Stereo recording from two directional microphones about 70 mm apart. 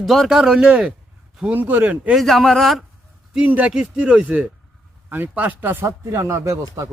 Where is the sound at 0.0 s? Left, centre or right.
Centre.